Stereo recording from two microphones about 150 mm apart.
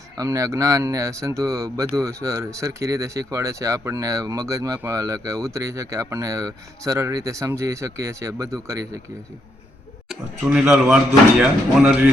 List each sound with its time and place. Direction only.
0.2 s speech: 20° right (ahead or behind)
10.1 s speech: 5° right (ahead or behind)